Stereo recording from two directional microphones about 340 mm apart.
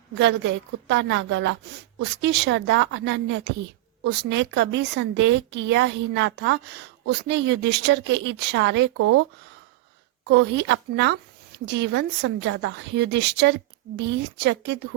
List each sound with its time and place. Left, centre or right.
0.2 s a woman's voice: right
10.2 s a woman's voice: right